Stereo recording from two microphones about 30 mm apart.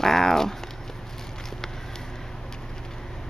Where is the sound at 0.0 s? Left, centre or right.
Centre.